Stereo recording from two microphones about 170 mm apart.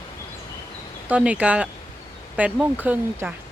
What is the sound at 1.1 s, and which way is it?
Speech, 10° right (ahead or behind).